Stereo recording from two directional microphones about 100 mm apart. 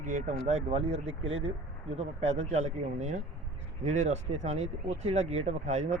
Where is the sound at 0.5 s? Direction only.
90° right.